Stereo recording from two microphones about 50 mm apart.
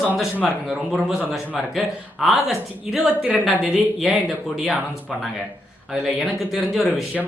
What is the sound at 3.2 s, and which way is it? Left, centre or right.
Speech, centre.